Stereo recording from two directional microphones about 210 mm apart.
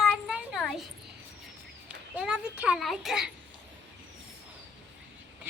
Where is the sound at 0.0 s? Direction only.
5° right (ahead or behind).